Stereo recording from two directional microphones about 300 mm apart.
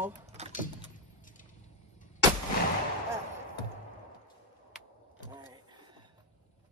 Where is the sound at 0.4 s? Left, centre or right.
Right.